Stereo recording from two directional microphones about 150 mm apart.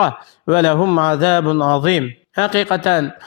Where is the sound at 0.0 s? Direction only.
35° left (ahead or behind).